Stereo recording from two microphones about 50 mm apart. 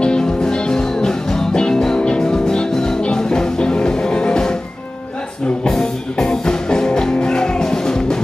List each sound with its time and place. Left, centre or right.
0.0 s music: centre
5.6 s music: centre